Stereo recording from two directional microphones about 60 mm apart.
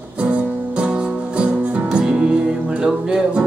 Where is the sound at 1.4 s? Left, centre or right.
Centre.